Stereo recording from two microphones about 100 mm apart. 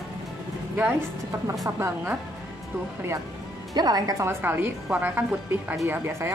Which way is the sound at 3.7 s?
40° right (ahead or behind).